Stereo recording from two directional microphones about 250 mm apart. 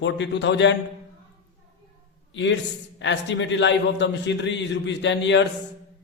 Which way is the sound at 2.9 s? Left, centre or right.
Left.